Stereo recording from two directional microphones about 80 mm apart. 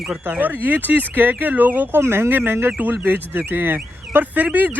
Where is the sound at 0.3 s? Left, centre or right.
Right.